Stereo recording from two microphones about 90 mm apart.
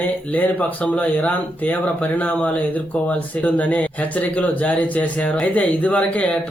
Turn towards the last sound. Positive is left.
turn(degrees=15)  # may be behind; listen again after turning